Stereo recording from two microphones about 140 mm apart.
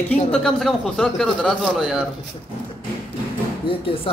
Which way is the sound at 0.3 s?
5° left (ahead or behind).